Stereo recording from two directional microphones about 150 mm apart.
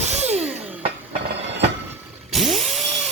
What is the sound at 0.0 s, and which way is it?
Music, 45° right (ahead or behind).